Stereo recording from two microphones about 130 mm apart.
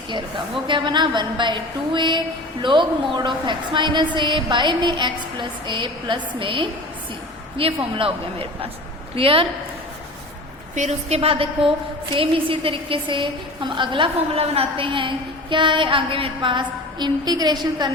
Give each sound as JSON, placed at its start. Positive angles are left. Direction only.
{"t": 0.7, "sound": "a woman's voice", "side_deg": -35}
{"t": 10.8, "sound": "a woman's voice", "side_deg": -55}